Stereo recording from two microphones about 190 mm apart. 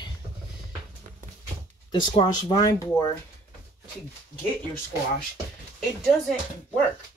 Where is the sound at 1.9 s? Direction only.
25° left (ahead or behind).